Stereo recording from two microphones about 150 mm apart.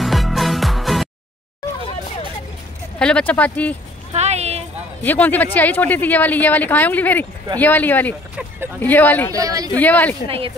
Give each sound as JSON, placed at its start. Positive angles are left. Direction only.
{"t": 0.0, "sound": "music", "side_deg": 0}
{"t": 3.0, "sound": "speech", "side_deg": 5}
{"t": 4.1, "sound": "a sound", "side_deg": -45}
{"t": 5.0, "sound": "speech", "side_deg": 10}
{"t": 9.3, "sound": "speech", "side_deg": -25}
{"t": 9.8, "sound": "speech", "side_deg": 10}